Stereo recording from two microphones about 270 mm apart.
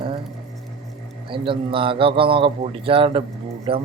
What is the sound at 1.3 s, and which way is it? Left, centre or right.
A man's voice, centre.